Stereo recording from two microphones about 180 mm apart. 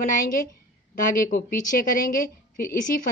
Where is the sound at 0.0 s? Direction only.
50° left (ahead or behind).